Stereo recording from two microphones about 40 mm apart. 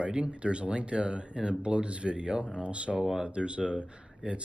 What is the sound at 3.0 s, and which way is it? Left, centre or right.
Speech, centre.